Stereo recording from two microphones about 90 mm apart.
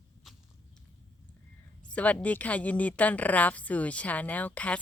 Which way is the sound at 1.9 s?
15° left (ahead or behind).